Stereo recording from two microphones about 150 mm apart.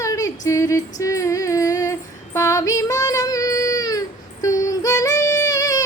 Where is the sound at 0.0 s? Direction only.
20° left (ahead or behind).